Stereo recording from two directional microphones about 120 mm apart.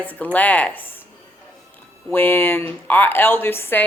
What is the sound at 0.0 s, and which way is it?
Speech, 15° left (ahead or behind).